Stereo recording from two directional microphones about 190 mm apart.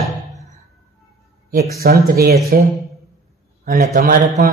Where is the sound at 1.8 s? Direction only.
55° right (ahead or behind).